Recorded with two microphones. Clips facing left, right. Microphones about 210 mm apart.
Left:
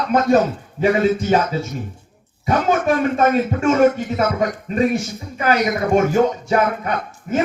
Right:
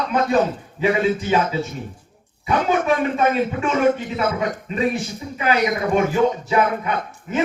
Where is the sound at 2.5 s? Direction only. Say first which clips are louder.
Left 2 dB; 45° left (ahead or behind).